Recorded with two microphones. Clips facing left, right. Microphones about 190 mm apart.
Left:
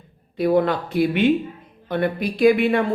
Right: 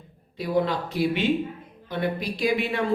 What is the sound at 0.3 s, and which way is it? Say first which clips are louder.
Speech: left 6 dB; 55° left (ahead or behind).